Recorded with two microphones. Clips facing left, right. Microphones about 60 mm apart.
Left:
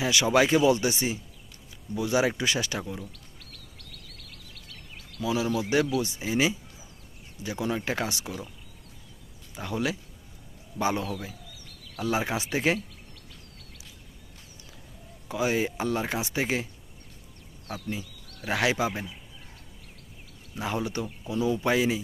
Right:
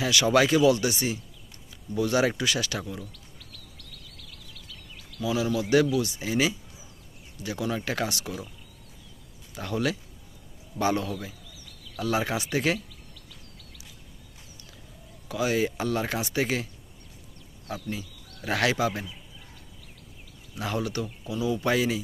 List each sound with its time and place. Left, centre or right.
0.0 s speech: centre
2.0 s speech: centre
2.4 s speech: left
4.4 s a sound: left
5.2 s speech: left
9.6 s speech: centre
15.3 s speech: left
18.4 s speech: centre
20.6 s speech: left